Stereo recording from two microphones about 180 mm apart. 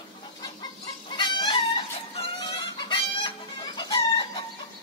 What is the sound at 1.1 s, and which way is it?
Chicken, 25° left (ahead or behind).